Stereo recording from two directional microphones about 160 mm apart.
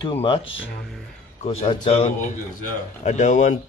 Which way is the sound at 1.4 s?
40° left (ahead or behind).